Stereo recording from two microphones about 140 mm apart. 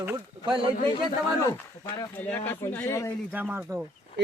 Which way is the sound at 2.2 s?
15° left (ahead or behind).